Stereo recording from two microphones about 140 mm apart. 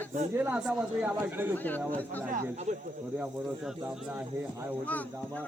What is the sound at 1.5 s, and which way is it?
Speech, 15° left (ahead or behind).